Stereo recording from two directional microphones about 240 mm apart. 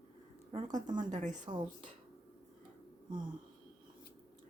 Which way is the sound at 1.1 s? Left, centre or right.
Right.